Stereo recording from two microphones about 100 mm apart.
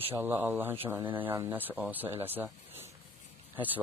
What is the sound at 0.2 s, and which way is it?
Speech, 20° right (ahead or behind).